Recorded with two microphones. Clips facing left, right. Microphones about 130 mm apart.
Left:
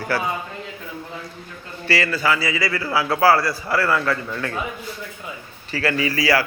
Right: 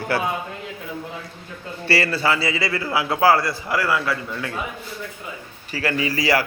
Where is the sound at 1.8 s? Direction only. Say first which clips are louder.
Even; 30° right (ahead or behind); by 4.5 s 10° right (ahead or behind).